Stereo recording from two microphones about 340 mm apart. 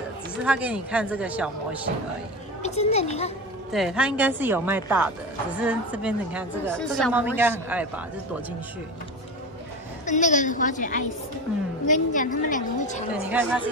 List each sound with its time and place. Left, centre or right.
0.4 s a woman's voice: centre
2.6 s a woman's voice: centre
3.7 s a woman's voice: centre
10.0 s a woman's voice: left
13.1 s a woman's voice: centre